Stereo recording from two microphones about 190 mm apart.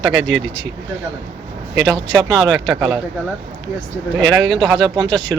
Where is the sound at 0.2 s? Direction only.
75° right (ahead or behind).